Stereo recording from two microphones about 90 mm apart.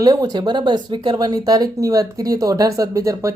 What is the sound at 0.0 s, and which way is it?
Speech, 50° right (ahead or behind).